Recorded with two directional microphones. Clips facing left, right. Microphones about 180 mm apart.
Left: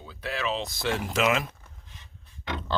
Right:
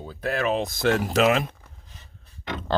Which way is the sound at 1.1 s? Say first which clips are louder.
Right 3 dB; 35° right (ahead or behind).